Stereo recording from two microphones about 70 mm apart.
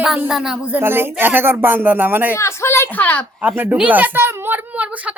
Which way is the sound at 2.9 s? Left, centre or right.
Left.